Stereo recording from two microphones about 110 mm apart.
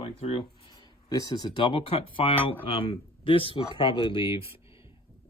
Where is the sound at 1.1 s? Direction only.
35° left (ahead or behind).